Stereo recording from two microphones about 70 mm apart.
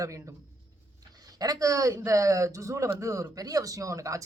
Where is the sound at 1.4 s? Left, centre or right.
Right.